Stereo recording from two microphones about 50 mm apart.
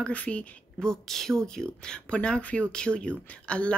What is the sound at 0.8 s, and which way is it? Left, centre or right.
Speech, centre.